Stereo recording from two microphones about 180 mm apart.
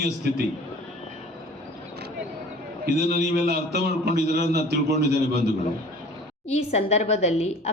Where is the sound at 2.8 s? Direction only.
60° right (ahead or behind).